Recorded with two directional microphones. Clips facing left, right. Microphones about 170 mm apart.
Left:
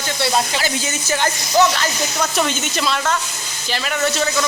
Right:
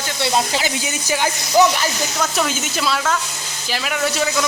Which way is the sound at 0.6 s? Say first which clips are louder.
Left 1 dB; 10° right (ahead or behind).